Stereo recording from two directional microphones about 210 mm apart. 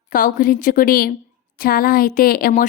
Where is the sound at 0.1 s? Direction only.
40° left (ahead or behind).